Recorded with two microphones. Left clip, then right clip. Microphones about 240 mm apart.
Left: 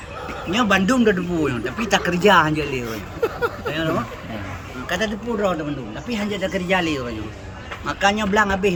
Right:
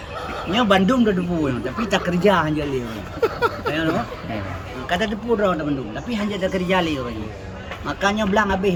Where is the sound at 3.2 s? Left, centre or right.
Centre.